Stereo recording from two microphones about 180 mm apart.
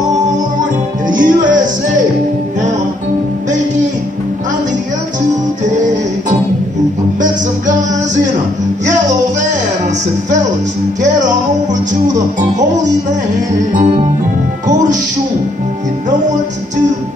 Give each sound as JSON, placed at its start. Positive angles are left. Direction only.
{"t": 1.0, "sound": "music", "side_deg": -45}
{"t": 7.2, "sound": "music", "side_deg": -45}
{"t": 11.0, "sound": "music", "side_deg": -45}
{"t": 14.7, "sound": "speech", "side_deg": -45}
{"t": 16.1, "sound": "music", "side_deg": -40}